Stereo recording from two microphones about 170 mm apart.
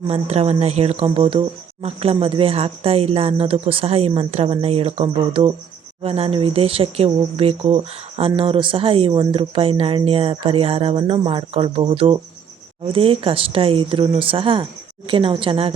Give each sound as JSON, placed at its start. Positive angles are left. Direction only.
{"t": 0.1, "sound": "speech", "side_deg": -35}